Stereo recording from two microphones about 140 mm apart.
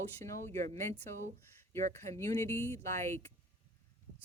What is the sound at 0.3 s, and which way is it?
Speech, 20° left (ahead or behind).